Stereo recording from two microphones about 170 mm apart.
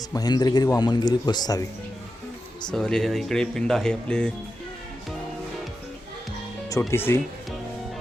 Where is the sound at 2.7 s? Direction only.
5° left (ahead or behind).